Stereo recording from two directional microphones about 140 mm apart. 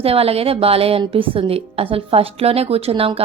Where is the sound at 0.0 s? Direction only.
45° right (ahead or behind).